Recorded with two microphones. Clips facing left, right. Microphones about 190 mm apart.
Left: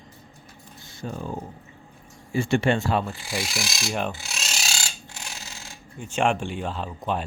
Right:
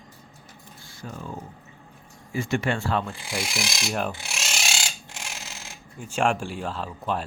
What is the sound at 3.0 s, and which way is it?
Speech, centre (ahead or behind).